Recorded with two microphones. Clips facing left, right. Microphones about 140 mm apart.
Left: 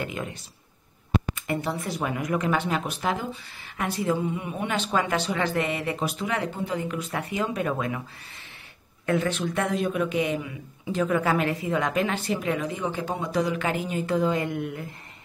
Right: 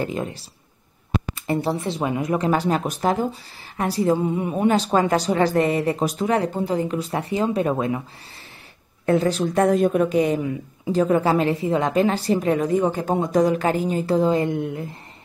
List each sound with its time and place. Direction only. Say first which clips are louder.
0.0 s speech: right 6 dB; 35° right (ahead or behind)
9.0 s speech: right 6 dB; 35° right (ahead or behind)